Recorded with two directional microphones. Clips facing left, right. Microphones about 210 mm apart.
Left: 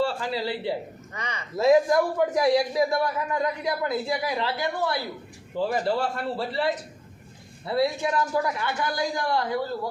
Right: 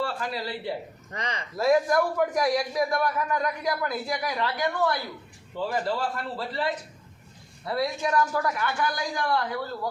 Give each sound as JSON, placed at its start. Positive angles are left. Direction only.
{"t": 0.0, "sound": "a man's voice", "side_deg": 25}
{"t": 1.1, "sound": "speech", "side_deg": -35}
{"t": 1.5, "sound": "a man's voice", "side_deg": 20}